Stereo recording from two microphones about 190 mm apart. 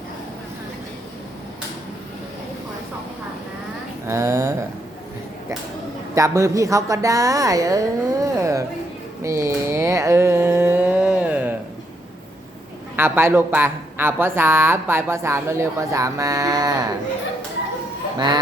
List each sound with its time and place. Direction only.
4.0 s speech: 15° right (ahead or behind)
6.1 s speech: 15° right (ahead or behind)
13.0 s speech: 10° right (ahead or behind)